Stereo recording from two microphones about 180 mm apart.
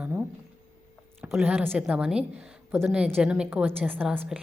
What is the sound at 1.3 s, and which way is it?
A woman's voice, 10° right (ahead or behind).